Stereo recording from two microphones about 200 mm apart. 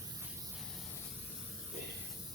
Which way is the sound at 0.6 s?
5° left (ahead or behind).